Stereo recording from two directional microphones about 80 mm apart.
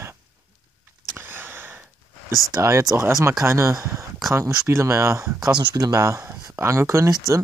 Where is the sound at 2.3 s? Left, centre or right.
Left.